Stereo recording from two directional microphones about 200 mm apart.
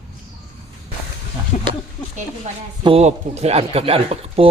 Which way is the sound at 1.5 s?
40° left (ahead or behind).